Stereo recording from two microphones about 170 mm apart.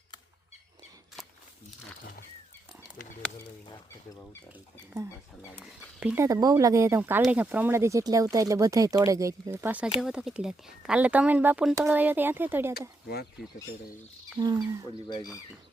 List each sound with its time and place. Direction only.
1.2 s a sound: centre (ahead or behind)
6.0 s speech: 10° right (ahead or behind)
14.3 s speech: 25° right (ahead or behind)
15.0 s speech: 25° left (ahead or behind)